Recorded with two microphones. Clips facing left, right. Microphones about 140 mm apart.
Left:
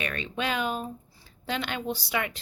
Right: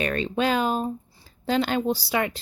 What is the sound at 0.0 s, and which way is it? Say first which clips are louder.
A woman's voice: right 7 dB; 35° right (ahead or behind).